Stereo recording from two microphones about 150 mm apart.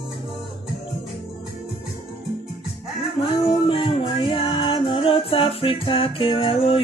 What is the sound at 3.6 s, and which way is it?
Music, 40° left (ahead or behind).